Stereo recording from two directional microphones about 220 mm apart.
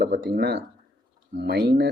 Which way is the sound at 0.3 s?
50° right (ahead or behind).